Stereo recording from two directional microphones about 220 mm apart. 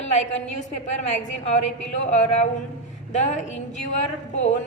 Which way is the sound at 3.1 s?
35° left (ahead or behind).